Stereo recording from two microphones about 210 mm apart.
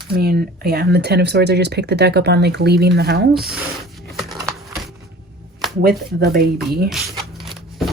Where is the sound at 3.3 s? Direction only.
Centre (ahead or behind).